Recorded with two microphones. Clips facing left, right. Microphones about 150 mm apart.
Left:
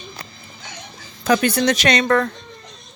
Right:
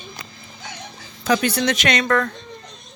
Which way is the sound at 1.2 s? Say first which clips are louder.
Left 2 dB; 50° left (ahead or behind).